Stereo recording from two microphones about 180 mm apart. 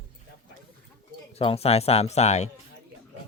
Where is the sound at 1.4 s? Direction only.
35° left (ahead or behind).